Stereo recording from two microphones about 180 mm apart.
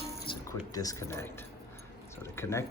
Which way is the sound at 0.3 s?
30° left (ahead or behind).